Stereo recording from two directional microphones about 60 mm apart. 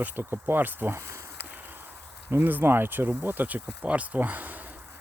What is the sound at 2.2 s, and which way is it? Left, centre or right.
Speech, right.